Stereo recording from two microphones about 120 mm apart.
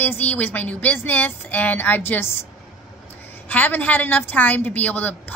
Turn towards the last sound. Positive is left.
turn(degrees=15)  # may be behind; listen again after turning